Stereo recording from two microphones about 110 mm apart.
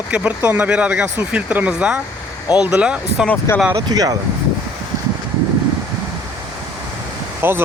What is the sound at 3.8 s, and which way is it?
Speech, 35° right (ahead or behind).